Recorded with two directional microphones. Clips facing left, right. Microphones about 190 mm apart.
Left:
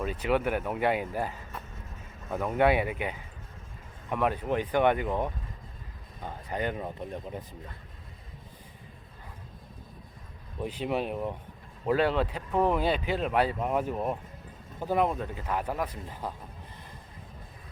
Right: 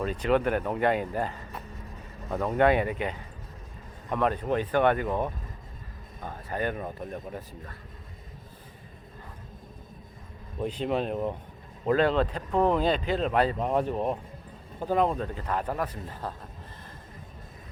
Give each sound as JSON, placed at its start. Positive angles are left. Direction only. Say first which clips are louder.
{"t": 0.0, "sound": "speech", "louder": "right 3 dB", "side_deg": 10}
{"t": 2.5, "sound": "speech", "louder": "right 2 dB", "side_deg": 10}
{"t": 10.6, "sound": "speech", "louder": "right 2 dB", "side_deg": 10}